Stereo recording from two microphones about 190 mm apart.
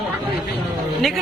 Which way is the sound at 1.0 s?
Centre (ahead or behind).